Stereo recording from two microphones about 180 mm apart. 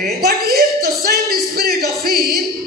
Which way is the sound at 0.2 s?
60° right (ahead or behind).